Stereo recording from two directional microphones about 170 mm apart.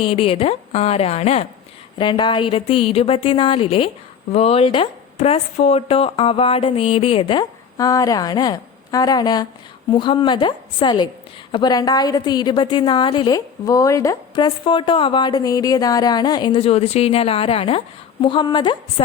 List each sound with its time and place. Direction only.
0.0 s a woman's voice: 30° left (ahead or behind)